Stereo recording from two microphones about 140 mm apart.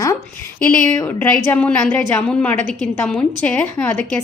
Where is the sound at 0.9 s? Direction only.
20° left (ahead or behind).